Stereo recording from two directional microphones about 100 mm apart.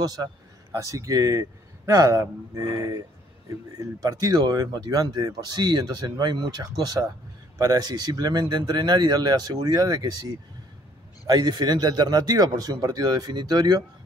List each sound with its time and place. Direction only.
0.0 s a man's voice: 40° right (ahead or behind)